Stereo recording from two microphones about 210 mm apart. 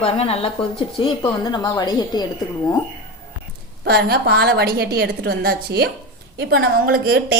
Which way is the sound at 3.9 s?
50° right (ahead or behind).